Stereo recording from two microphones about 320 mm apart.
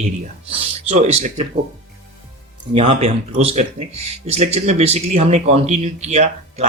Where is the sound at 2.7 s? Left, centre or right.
Centre.